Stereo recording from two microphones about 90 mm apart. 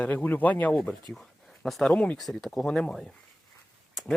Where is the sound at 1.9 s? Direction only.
15° left (ahead or behind).